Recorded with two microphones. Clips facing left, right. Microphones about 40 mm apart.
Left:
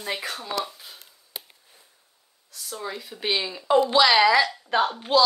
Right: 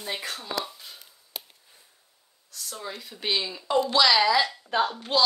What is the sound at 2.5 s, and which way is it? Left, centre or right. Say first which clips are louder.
Speech: left 3 dB; centre.